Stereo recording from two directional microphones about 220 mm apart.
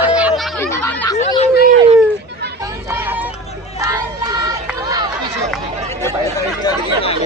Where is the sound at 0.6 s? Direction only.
10° left (ahead or behind).